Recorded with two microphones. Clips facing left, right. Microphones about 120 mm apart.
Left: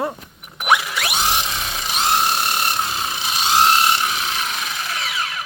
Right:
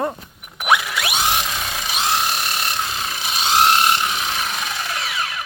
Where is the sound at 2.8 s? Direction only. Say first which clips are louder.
Left 2 dB; 20° left (ahead or behind).